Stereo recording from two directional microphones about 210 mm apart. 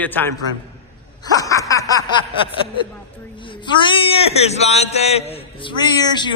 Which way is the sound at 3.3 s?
25° left (ahead or behind).